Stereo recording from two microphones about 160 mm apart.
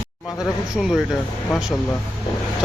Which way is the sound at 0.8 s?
Centre (ahead or behind).